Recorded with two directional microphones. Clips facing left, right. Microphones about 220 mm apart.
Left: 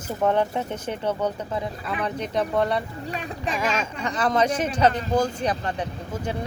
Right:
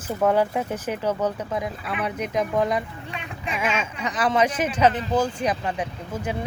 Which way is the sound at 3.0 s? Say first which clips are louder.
Left 4 dB; 35° left (ahead or behind).